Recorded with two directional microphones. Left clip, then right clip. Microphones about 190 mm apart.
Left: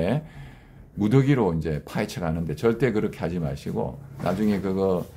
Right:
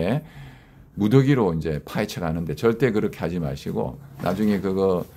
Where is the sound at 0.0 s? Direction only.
20° right (ahead or behind).